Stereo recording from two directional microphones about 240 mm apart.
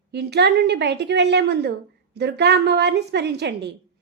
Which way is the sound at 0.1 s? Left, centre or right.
Right.